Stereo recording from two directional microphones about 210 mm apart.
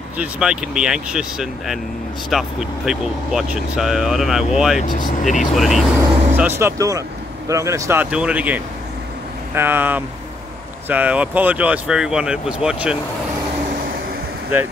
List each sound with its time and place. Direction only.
0.2 s speech: 5° right (ahead or behind)
5.2 s speech: 35° left (ahead or behind)
5.5 s speech: centre (ahead or behind)